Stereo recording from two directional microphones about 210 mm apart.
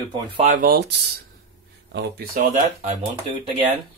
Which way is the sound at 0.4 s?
40° right (ahead or behind).